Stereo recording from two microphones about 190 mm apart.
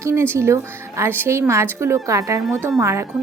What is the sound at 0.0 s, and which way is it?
A woman's voice, 15° right (ahead or behind).